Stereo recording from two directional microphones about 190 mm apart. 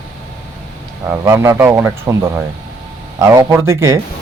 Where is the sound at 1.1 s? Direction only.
15° right (ahead or behind).